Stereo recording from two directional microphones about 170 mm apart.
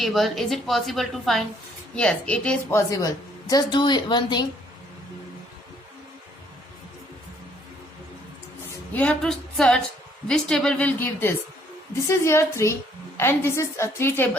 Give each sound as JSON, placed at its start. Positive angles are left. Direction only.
{"t": 0.0, "sound": "a woman's voice", "side_deg": 0}
{"t": 8.9, "sound": "a woman's voice", "side_deg": 10}